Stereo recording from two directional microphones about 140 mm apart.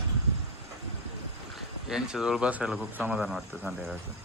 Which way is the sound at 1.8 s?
5° right (ahead or behind).